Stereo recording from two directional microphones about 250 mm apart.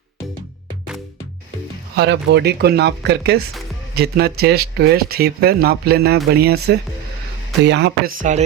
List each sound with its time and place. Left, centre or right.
2.0 s speech: right